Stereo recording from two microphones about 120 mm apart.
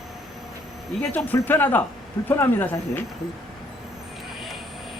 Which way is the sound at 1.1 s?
15° left (ahead or behind).